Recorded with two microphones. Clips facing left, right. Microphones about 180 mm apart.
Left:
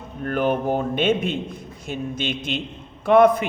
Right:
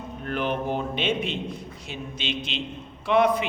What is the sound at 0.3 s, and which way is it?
A man's voice, 45° left (ahead or behind).